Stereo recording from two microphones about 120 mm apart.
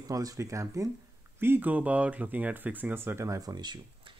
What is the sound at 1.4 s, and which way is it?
Speech, 15° right (ahead or behind).